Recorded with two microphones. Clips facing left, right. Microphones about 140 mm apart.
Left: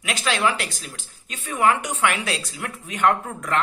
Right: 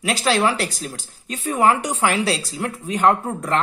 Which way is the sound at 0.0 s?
35° right (ahead or behind).